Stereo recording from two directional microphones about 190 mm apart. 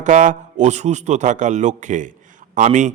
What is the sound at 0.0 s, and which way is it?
A man's voice, 40° right (ahead or behind).